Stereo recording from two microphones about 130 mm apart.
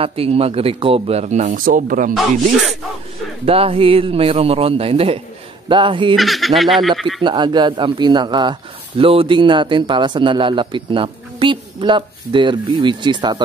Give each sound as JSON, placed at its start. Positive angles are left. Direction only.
{"t": 0.0, "sound": "speech", "side_deg": -45}
{"t": 3.4, "sound": "a man's voice", "side_deg": -45}
{"t": 6.1, "sound": "speech", "side_deg": 0}
{"t": 7.2, "sound": "a man's voice", "side_deg": -35}